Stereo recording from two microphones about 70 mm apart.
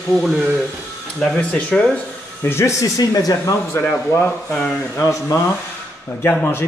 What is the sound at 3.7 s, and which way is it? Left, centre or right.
Speech, left.